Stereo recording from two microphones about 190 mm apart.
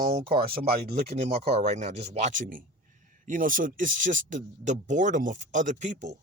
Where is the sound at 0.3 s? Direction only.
55° right (ahead or behind).